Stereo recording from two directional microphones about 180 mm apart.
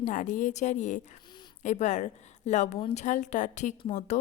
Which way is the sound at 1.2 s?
25° left (ahead or behind).